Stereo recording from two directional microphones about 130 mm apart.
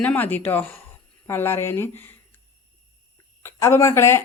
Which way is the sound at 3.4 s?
20° left (ahead or behind).